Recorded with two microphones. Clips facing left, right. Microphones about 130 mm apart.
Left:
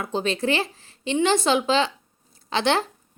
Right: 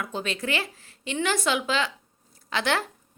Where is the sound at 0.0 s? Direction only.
30° left (ahead or behind).